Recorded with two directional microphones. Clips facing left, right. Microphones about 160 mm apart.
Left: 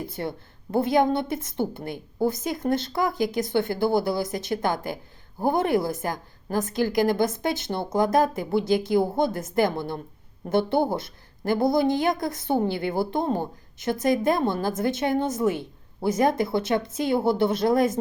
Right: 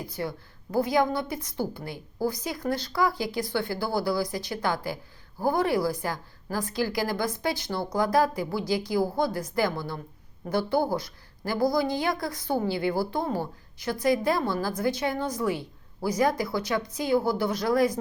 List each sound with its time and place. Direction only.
0.0 s a woman's voice: 25° left (ahead or behind)